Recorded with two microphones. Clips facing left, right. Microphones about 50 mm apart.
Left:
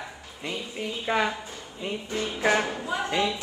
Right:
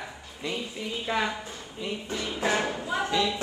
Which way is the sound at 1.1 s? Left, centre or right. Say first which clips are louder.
Left 3 dB; centre.